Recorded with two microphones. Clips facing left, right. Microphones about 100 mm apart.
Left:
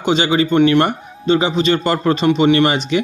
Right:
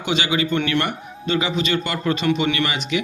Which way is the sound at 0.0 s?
30° left (ahead or behind).